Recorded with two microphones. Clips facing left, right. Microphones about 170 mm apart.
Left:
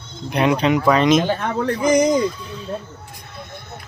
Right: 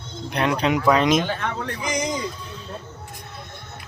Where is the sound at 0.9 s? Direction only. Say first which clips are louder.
Left 3 dB; 5° right (ahead or behind).